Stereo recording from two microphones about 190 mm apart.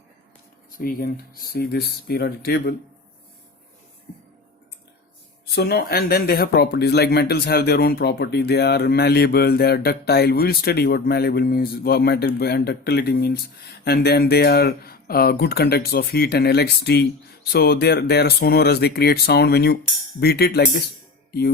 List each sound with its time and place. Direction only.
0.8 s speech: 50° left (ahead or behind)
5.5 s speech: 60° left (ahead or behind)